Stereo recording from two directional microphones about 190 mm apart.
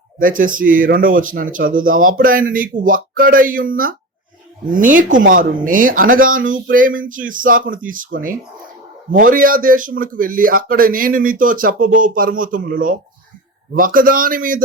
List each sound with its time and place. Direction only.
0.2 s a man's voice: 45° right (ahead or behind)